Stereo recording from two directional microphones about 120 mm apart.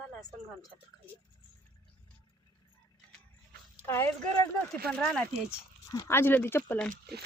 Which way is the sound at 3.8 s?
20° left (ahead or behind).